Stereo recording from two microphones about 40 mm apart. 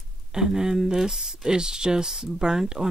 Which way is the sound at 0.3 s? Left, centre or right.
Centre.